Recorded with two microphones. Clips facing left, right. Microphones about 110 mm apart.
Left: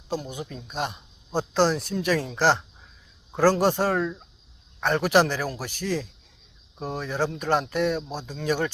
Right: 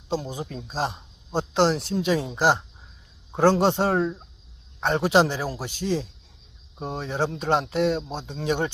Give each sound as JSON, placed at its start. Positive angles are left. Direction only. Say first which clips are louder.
{"t": 0.1, "sound": "speech", "louder": "right 2 dB", "side_deg": -30}